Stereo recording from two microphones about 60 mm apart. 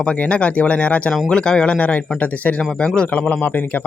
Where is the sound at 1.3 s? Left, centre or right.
Centre.